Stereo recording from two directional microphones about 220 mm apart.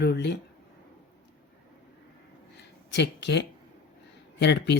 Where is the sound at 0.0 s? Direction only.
50° left (ahead or behind).